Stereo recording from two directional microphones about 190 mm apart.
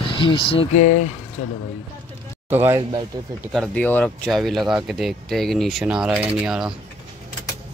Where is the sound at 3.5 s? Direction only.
10° left (ahead or behind).